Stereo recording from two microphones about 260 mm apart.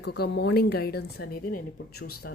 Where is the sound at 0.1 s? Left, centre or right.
Left.